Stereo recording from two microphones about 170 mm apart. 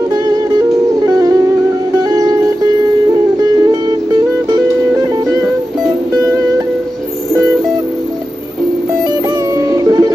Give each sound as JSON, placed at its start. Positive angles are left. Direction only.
{"t": 0.1, "sound": "music", "side_deg": -25}
{"t": 9.6, "sound": "music", "side_deg": -20}